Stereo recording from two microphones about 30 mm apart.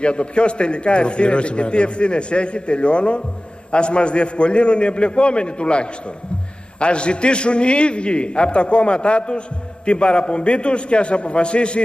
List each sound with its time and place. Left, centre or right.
0.0 s a man's voice: left